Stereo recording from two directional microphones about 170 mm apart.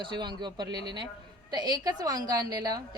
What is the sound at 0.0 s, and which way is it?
A woman's voice, 25° right (ahead or behind).